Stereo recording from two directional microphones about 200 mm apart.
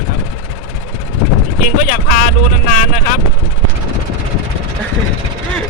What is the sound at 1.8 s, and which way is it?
Speech, 45° left (ahead or behind).